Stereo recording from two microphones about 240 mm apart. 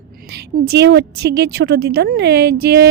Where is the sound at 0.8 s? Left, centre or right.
Right.